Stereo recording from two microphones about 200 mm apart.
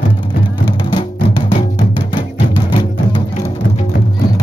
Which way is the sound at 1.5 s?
35° left (ahead or behind).